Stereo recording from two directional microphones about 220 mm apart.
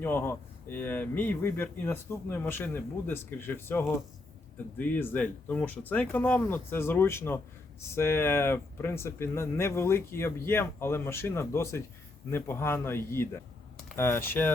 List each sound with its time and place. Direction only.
0.0 s speech: 10° left (ahead or behind)